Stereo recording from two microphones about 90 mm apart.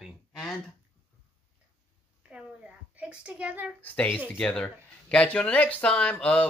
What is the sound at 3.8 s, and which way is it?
Speech, 20° left (ahead or behind).